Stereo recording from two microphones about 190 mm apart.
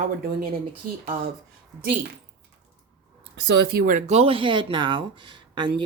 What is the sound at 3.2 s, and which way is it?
Speech, 60° right (ahead or behind).